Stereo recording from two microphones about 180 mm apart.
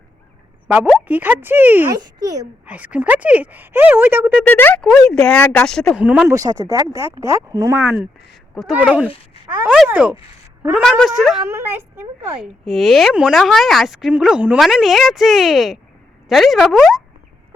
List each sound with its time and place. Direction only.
0.7 s speech: 5° right (ahead or behind)
4.4 s a woman's voice: 10° left (ahead or behind); by 10.8 s 10° right (ahead or behind)
10.8 s speech: centre (ahead or behind)
11.4 s speech: 15° right (ahead or behind)
12.6 s speech: centre (ahead or behind)